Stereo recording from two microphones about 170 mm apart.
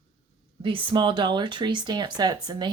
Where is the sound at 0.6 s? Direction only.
30° right (ahead or behind).